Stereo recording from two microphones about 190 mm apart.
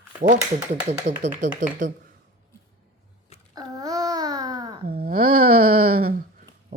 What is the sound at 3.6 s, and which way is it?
Babbling, 20° right (ahead or behind).